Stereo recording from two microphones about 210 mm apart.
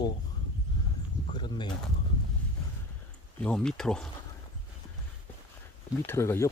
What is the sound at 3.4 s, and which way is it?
Speech, 5° left (ahead or behind).